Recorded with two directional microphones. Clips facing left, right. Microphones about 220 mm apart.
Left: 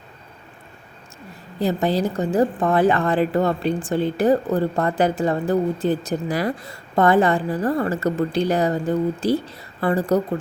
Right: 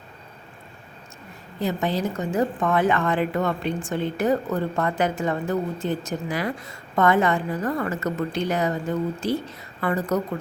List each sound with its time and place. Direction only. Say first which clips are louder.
1.5 s a woman's voice: left 4 dB; 35° left (ahead or behind)